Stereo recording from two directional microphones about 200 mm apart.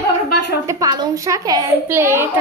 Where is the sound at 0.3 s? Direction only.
55° left (ahead or behind).